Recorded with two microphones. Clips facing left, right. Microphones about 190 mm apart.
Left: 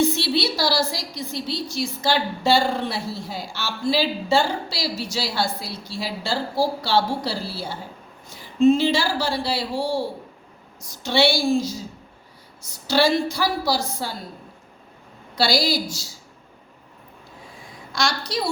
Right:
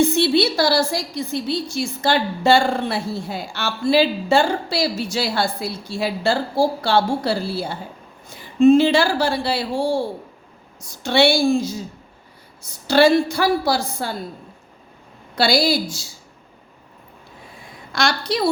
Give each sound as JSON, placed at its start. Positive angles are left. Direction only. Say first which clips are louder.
{"t": 0.0, "sound": "a woman's voice", "louder": "right 5 dB", "side_deg": -50}
{"t": 11.0, "sound": "a woman's voice", "louder": "right 4 dB", "side_deg": -55}
{"t": 12.9, "sound": "a woman's voice", "louder": "right 5 dB", "side_deg": -55}
{"t": 15.4, "sound": "a woman's voice", "louder": "right 3 dB", "side_deg": -55}
{"t": 17.9, "sound": "a woman's voice", "louder": "right 4 dB", "side_deg": -60}